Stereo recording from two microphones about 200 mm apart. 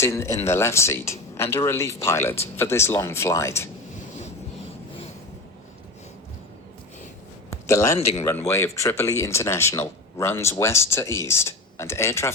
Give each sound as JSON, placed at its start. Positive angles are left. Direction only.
{"t": 0.0, "sound": "speech", "side_deg": 15}
{"t": 7.5, "sound": "a sound", "side_deg": 15}
{"t": 8.2, "sound": "speech", "side_deg": 15}